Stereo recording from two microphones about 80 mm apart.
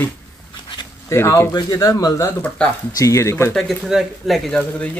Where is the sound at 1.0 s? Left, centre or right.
Left.